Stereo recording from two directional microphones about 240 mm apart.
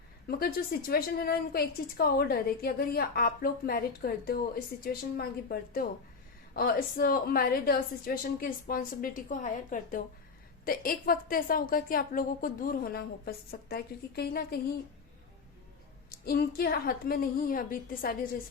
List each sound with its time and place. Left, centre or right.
0.3 s a woman's voice: left
16.1 s a woman's voice: left